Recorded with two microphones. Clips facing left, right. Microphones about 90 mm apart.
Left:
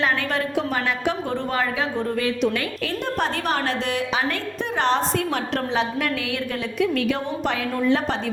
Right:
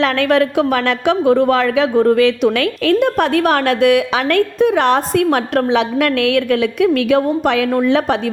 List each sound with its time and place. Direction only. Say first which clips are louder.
0.0 s speech: right 9 dB; 80° right